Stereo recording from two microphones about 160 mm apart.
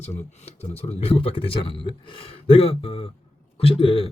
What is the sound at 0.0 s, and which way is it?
A man's voice, 45° left (ahead or behind).